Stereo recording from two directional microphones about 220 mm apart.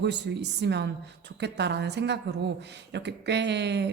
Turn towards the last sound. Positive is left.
turn(degrees=-50)  # may be behind; listen again after turning